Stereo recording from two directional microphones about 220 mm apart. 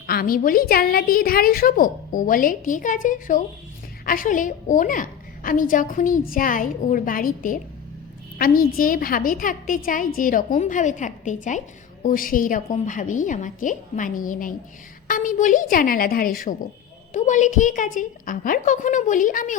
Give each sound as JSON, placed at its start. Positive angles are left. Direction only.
{"t": 0.1, "sound": "a woman's voice", "side_deg": 40}